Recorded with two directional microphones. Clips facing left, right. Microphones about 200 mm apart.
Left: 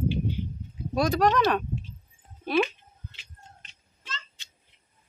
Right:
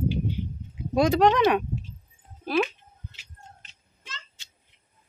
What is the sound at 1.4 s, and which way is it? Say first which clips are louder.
Speech: right 3 dB; 10° right (ahead or behind).